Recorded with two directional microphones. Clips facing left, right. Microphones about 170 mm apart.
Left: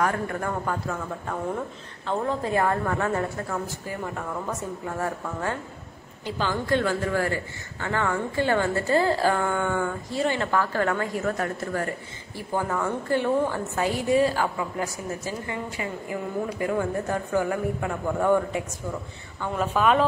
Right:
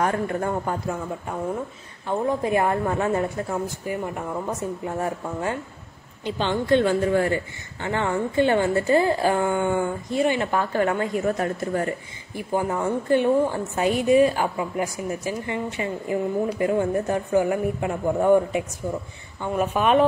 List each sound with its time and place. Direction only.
0.0 s a woman's voice: 25° right (ahead or behind)